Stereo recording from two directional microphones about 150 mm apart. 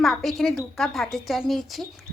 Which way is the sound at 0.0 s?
Centre (ahead or behind).